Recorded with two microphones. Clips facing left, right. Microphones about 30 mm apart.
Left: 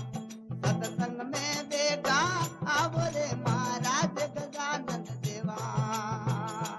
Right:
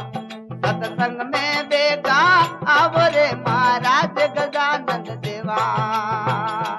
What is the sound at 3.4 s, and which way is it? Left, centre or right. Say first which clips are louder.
Music: right 14 dB; right.